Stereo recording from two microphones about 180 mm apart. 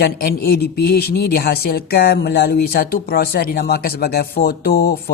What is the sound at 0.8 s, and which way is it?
A man's voice, 60° left (ahead or behind).